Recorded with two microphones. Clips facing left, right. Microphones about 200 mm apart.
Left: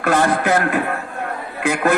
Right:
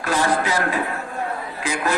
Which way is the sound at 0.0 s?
60° left (ahead or behind).